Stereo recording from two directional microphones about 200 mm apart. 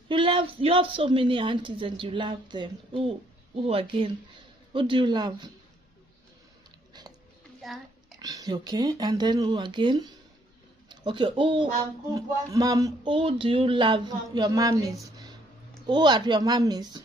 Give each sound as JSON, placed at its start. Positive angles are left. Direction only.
{"t": 0.1, "sound": "speech", "side_deg": -25}
{"t": 6.9, "sound": "dog", "side_deg": -20}
{"t": 7.6, "sound": "oink", "side_deg": 0}
{"t": 8.2, "sound": "speech", "side_deg": -20}